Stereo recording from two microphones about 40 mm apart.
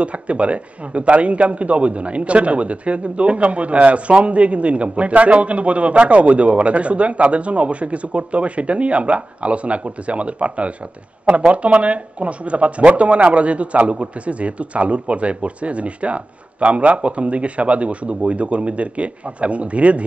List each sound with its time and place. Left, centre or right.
0.0 s a man's voice: right